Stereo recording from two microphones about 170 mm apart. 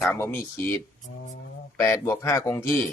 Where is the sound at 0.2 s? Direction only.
15° left (ahead or behind).